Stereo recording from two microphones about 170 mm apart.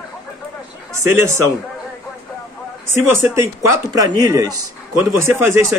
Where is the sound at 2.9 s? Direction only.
15° right (ahead or behind).